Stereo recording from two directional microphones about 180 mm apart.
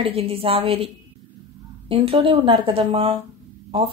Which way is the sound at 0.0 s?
35° right (ahead or behind).